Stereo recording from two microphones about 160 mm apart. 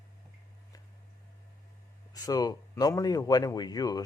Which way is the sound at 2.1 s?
25° left (ahead or behind).